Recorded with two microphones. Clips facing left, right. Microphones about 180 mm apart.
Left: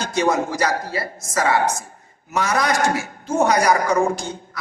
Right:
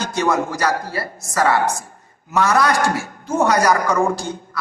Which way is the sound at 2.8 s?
20° left (ahead or behind).